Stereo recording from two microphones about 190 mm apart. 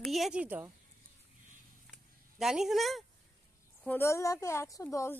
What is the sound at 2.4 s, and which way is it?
Speech, centre (ahead or behind).